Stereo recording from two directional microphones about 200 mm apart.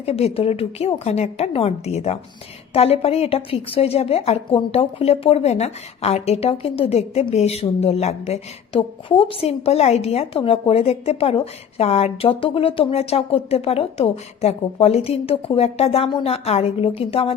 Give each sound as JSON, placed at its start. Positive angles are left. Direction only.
{"t": 0.0, "sound": "a woman's voice", "side_deg": 30}